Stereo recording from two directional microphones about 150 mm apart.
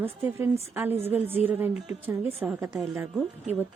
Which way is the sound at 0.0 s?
15° right (ahead or behind).